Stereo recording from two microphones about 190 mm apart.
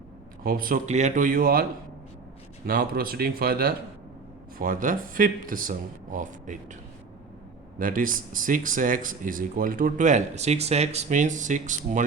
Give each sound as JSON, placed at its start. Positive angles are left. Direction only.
{"t": 0.4, "sound": "speech", "side_deg": -50}
{"t": 2.6, "sound": "speech", "side_deg": -50}
{"t": 7.8, "sound": "speech", "side_deg": -45}